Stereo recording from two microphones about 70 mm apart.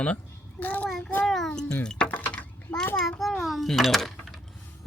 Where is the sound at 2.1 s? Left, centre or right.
Left.